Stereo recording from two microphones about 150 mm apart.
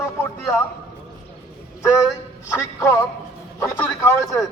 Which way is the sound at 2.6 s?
20° left (ahead or behind).